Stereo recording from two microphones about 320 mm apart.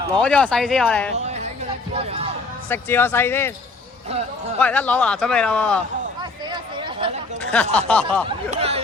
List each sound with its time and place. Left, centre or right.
0.2 s speech: centre
1.9 s music: centre
2.6 s speech: centre
4.6 s speech: centre
7.5 s speech: centre
8.4 s a sound: centre